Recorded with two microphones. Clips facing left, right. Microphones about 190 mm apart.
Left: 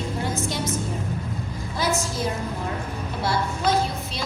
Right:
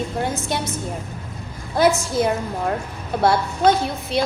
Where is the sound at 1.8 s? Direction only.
60° right (ahead or behind).